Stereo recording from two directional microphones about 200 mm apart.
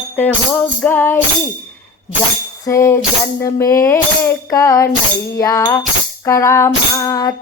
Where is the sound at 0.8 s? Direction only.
10° left (ahead or behind).